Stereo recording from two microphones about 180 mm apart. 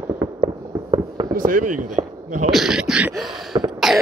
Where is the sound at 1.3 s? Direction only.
50° right (ahead or behind).